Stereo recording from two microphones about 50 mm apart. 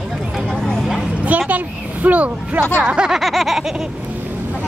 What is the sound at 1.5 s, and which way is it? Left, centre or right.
Speech, right.